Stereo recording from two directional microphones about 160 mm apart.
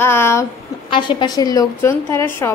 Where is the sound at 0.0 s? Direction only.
15° left (ahead or behind).